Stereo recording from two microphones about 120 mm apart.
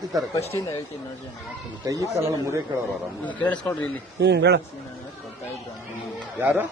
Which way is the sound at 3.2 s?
10° left (ahead or behind).